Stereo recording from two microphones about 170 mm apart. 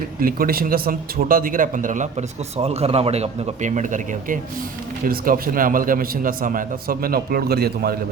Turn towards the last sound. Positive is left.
turn(degrees=-65)  # may be behind; listen again after turning